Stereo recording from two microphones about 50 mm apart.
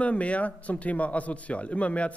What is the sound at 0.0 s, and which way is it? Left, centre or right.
A man's voice, left.